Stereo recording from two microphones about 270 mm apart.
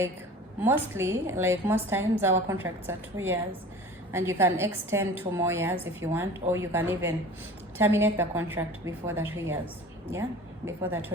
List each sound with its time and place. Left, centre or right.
0.6 s a woman's voice: centre
10.7 s a woman's voice: centre